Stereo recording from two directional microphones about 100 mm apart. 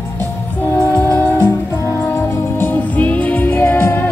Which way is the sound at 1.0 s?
20° left (ahead or behind).